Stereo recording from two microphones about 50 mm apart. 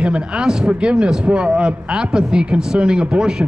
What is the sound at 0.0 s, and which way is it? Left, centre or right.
A man's voice, centre.